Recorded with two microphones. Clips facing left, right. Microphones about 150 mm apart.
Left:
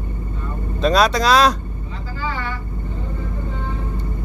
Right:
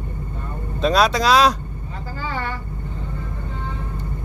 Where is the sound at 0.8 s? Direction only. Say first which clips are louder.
Left 1 dB; 5° right (ahead or behind).